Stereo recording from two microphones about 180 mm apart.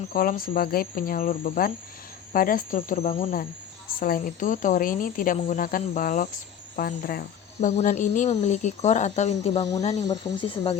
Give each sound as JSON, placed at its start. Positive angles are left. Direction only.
{"t": 0.1, "sound": "speech", "side_deg": 50}
{"t": 3.1, "sound": "speech", "side_deg": 30}
{"t": 3.8, "sound": "speech", "side_deg": 50}
{"t": 7.8, "sound": "speech", "side_deg": 40}